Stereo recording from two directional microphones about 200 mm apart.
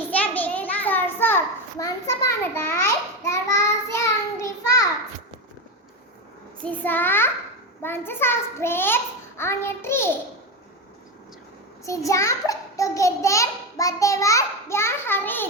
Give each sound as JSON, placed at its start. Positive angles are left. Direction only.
{"t": 0.2, "sound": "a sound", "side_deg": 10}
{"t": 6.7, "sound": "a child's voice", "side_deg": 10}
{"t": 11.9, "sound": "a child's voice", "side_deg": 15}